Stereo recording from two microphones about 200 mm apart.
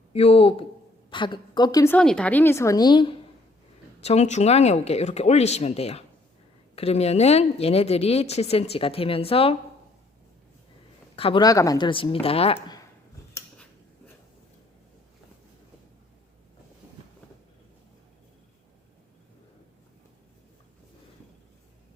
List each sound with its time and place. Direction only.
0.1 s a woman's voice: 30° left (ahead or behind)
4.0 s speech: 35° left (ahead or behind)
11.2 s speech: 25° left (ahead or behind)